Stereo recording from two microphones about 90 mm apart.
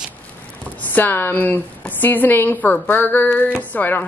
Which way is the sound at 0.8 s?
20° left (ahead or behind).